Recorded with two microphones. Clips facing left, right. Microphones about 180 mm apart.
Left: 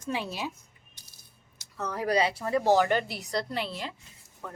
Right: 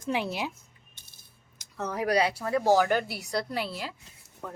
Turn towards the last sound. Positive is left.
turn(degrees=-5)  # may be behind; listen again after turning